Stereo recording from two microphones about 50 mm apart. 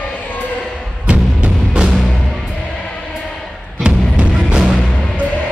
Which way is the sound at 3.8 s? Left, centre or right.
Right.